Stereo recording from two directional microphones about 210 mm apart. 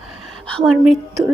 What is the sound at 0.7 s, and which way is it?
Speech, centre (ahead or behind).